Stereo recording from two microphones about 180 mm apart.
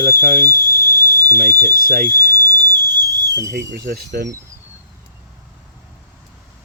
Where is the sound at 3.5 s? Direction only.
70° right (ahead or behind).